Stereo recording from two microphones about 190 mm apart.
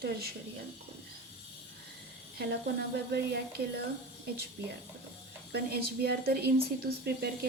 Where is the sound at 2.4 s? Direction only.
55° right (ahead or behind).